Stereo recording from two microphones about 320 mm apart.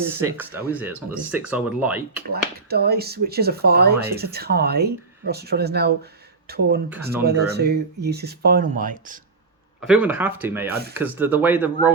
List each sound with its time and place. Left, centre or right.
0.2 s speech: centre
2.3 s speech: right
9.8 s speech: centre